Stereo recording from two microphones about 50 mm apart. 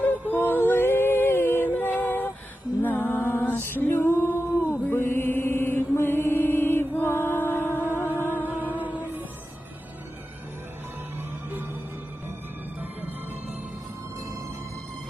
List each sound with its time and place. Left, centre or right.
0.3 s music: left
4.8 s mantra: left
5.0 s mantra: left
5.9 s music: left
8.4 s music: right
12.8 s music: right